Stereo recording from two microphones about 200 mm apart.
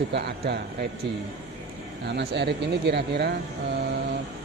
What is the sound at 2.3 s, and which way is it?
Speech, 60° right (ahead or behind).